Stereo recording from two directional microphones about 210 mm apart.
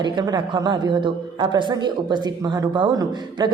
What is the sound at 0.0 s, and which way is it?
A woman's voice, 20° right (ahead or behind).